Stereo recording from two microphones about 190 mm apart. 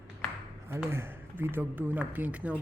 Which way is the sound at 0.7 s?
10° right (ahead or behind).